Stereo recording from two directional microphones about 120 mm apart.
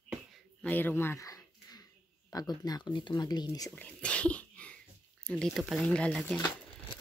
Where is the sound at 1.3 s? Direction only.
30° left (ahead or behind).